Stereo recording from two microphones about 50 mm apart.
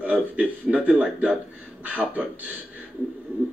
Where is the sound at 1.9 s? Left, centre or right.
Right.